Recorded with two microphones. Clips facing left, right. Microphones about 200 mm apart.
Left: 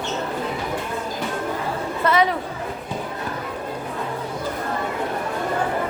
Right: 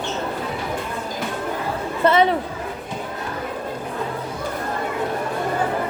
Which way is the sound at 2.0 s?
30° right (ahead or behind).